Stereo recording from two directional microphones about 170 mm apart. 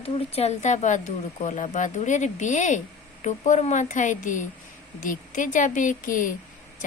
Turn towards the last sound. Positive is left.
turn(degrees=50)  # may be behind; listen again after turning